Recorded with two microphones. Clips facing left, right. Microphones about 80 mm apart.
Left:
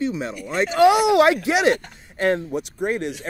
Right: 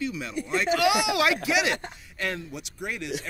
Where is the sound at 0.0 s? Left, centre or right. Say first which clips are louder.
Left 5 dB; left.